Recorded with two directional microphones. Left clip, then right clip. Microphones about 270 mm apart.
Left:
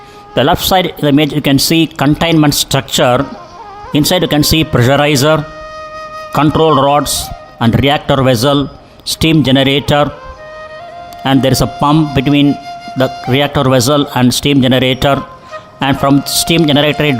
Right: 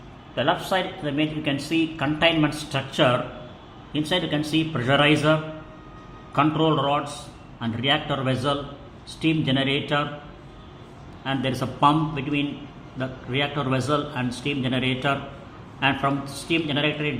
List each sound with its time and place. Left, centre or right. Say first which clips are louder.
0.3 s speech: left 13 dB; left
11.2 s speech: left 15 dB; left